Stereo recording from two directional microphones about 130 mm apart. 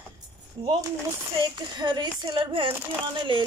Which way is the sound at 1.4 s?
35° right (ahead or behind).